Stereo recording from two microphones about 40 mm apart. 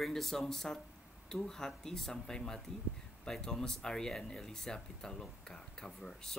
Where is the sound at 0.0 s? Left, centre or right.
Centre.